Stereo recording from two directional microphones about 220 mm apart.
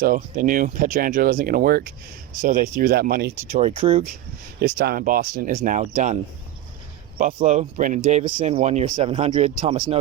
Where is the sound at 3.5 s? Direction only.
30° right (ahead or behind).